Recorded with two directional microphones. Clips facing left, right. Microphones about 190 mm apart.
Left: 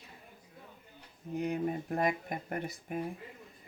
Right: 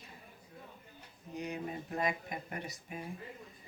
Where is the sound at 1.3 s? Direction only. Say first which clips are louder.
Left 7 dB; 55° left (ahead or behind).